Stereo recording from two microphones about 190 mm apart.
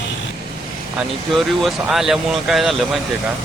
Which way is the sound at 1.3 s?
Centre (ahead or behind).